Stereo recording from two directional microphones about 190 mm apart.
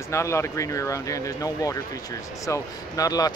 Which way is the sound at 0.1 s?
15° left (ahead or behind).